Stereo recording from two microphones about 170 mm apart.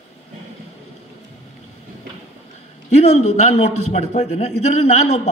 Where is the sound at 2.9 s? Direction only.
40° left (ahead or behind).